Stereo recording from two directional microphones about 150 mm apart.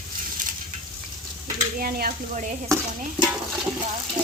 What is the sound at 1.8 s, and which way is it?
Speech, 70° right (ahead or behind).